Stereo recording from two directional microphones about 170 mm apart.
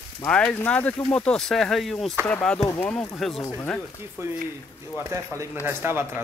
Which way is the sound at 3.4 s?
15° left (ahead or behind).